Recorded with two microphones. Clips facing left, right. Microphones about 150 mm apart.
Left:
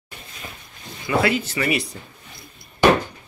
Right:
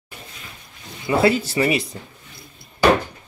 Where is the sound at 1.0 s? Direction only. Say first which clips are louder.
Right 3 dB; 30° right (ahead or behind).